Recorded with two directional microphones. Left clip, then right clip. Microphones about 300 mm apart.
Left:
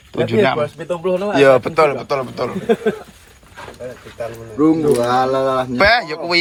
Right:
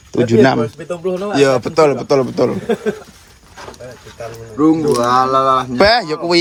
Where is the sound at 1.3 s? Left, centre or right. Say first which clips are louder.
Left 2 dB; centre.